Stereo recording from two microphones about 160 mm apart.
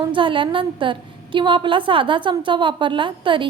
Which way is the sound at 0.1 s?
30° right (ahead or behind).